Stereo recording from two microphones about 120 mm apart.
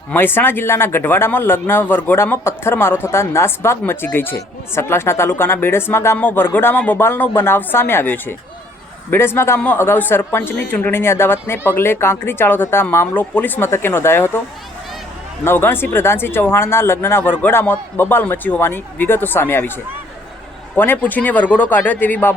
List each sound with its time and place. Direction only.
0.1 s speech: 15° left (ahead or behind)
15.4 s a man's voice: 20° left (ahead or behind)
20.7 s a man's voice: 15° left (ahead or behind)